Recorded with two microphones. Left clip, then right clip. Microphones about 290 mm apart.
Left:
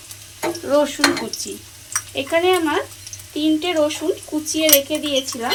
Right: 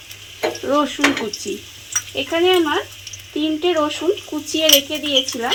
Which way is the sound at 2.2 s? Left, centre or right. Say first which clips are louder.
Right 1 dB; right.